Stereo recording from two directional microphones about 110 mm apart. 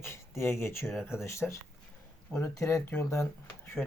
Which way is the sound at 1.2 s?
25° left (ahead or behind).